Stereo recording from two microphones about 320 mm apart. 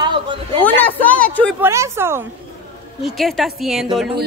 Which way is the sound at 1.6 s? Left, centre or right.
Centre.